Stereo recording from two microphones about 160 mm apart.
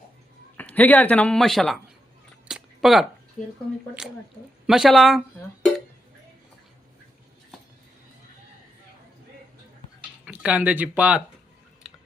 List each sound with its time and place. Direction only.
0.5 s a man's voice: 10° left (ahead or behind)
2.5 s a sound: centre (ahead or behind)
4.6 s speech: centre (ahead or behind)
10.2 s speech: 10° right (ahead or behind)